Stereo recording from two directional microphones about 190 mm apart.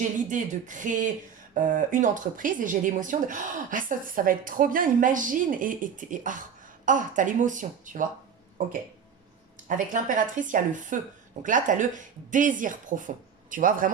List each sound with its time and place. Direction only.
0.3 s speech: 40° right (ahead or behind)
9.6 s speech: 45° right (ahead or behind)